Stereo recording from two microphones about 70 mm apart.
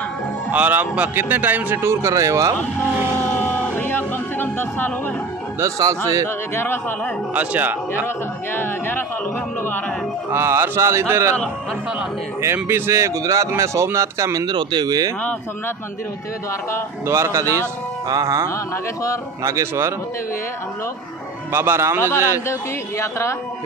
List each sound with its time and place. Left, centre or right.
0.5 s speech: right
1.8 s speech: right
3.4 s music: left
5.8 s a man's voice: right
6.2 s speech: left
7.3 s speech: right
8.5 s speech: left
10.3 s speech: right
12.6 s speech: right
14.4 s speech: right
17.0 s speech: right
21.5 s speech: right
22.5 s speech: left